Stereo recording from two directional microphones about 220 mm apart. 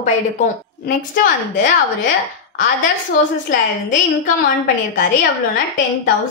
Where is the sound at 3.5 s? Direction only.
35° left (ahead or behind).